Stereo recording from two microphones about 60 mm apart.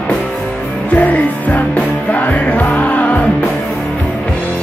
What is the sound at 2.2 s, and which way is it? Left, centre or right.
Music, left.